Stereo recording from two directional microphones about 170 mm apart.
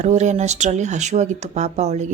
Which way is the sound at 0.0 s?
45° right (ahead or behind).